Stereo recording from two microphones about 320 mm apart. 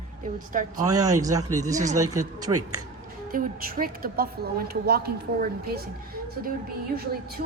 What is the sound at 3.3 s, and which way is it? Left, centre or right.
A woman's voice, right.